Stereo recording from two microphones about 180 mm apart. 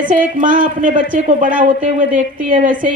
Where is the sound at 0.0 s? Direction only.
50° right (ahead or behind).